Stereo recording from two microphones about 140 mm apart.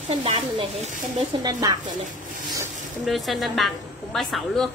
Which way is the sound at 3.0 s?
Centre (ahead or behind).